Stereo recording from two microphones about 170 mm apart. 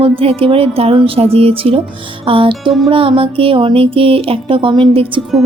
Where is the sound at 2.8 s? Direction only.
30° right (ahead or behind).